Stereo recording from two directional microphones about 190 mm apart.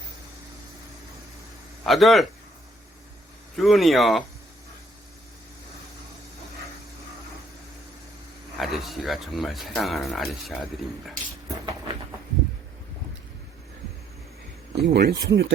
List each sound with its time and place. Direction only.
1.8 s speech: centre (ahead or behind)
3.6 s speech: centre (ahead or behind)
8.5 s speech: centre (ahead or behind)
14.8 s speech: 60° right (ahead or behind)